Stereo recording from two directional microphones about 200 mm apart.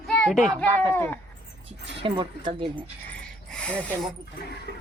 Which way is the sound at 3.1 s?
5° left (ahead or behind).